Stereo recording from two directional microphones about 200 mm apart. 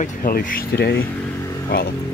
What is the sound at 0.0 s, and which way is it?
Speech, 45° left (ahead or behind).